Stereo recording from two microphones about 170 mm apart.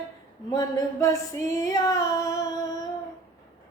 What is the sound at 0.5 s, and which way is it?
Music, 20° left (ahead or behind).